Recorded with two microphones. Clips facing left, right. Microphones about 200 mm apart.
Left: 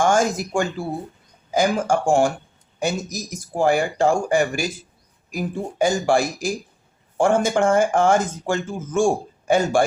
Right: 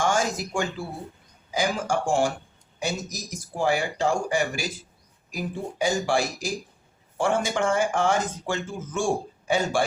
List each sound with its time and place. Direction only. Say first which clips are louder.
0.0 s speech: left 6 dB; 50° left (ahead or behind)